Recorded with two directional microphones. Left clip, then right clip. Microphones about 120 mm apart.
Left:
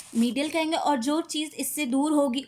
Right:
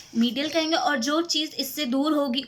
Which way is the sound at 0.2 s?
35° left (ahead or behind).